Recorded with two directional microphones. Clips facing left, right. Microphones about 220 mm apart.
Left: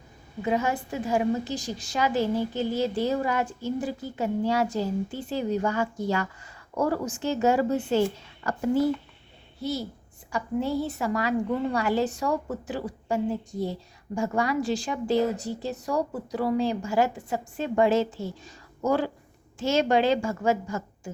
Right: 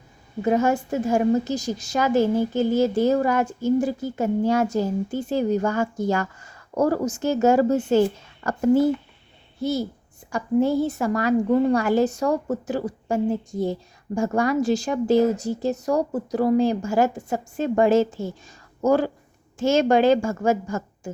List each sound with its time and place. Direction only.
0.4 s a woman's voice: 45° right (ahead or behind)